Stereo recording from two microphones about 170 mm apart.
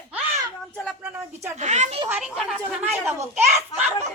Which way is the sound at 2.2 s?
Centre (ahead or behind).